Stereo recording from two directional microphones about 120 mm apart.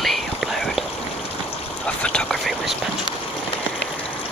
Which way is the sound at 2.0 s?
10° left (ahead or behind).